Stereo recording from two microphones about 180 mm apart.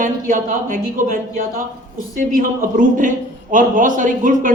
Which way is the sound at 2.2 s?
45° right (ahead or behind).